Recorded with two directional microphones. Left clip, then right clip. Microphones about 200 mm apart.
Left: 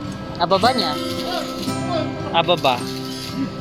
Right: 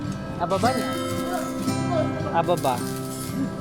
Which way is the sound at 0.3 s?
20° left (ahead or behind).